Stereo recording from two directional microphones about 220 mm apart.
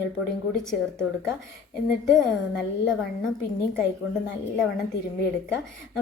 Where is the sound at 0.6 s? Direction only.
Centre (ahead or behind).